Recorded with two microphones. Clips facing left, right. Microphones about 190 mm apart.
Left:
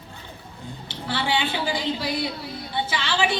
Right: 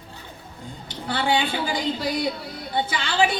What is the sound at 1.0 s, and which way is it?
A woman's voice, 50° right (ahead or behind).